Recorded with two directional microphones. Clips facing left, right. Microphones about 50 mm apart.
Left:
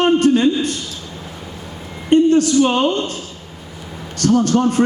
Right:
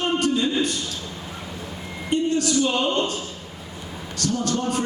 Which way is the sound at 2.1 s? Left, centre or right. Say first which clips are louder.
Left 9 dB; left.